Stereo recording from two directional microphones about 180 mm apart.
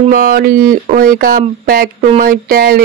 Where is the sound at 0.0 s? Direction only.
50° right (ahead or behind).